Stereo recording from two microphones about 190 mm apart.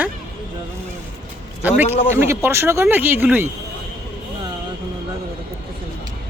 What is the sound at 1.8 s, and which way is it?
Speech, 35° left (ahead or behind).